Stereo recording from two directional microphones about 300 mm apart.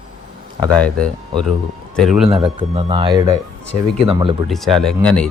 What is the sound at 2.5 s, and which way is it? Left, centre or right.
Speech, centre.